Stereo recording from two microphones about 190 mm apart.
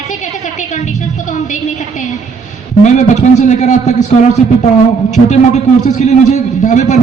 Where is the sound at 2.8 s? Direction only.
40° left (ahead or behind).